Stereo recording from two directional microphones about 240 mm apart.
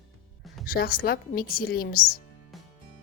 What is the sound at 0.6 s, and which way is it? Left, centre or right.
Speech, left.